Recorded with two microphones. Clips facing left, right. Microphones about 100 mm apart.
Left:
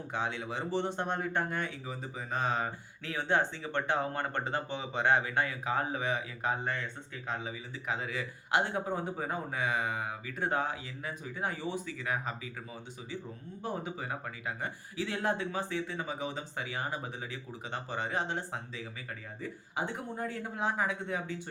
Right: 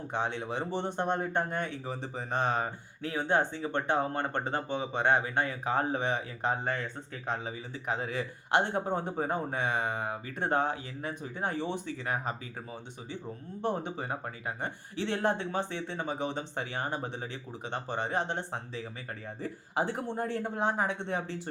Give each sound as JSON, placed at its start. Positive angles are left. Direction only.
{"t": 0.1, "sound": "speech", "side_deg": -20}
{"t": 0.7, "sound": "speech", "side_deg": -50}
{"t": 0.9, "sound": "speech", "side_deg": -20}
{"t": 2.5, "sound": "speech", "side_deg": -45}
{"t": 3.8, "sound": "speech", "side_deg": -25}
{"t": 6.1, "sound": "speech", "side_deg": -45}
{"t": 8.9, "sound": "speech", "side_deg": -25}
{"t": 12.0, "sound": "speech", "side_deg": -40}
{"t": 13.7, "sound": "speech", "side_deg": -30}
{"t": 17.8, "sound": "speech", "side_deg": -55}
{"t": 19.4, "sound": "speech", "side_deg": -35}